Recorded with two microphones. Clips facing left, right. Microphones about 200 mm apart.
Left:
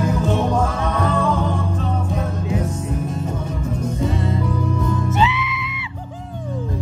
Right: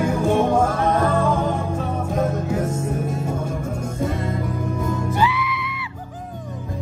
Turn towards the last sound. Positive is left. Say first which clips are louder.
# right 1 dB
turn(degrees=25)  # may be behind; listen again after turning